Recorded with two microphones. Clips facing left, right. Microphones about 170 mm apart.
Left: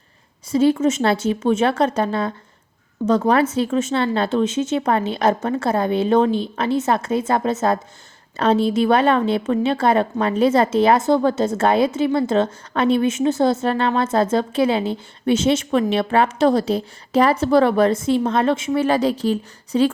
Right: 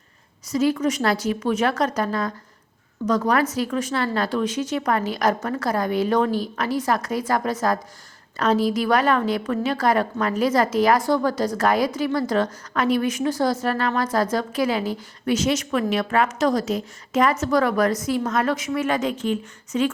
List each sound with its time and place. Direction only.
0.4 s a woman's voice: 30° left (ahead or behind)